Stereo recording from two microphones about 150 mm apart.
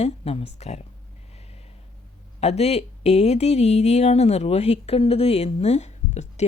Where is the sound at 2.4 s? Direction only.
45° left (ahead or behind).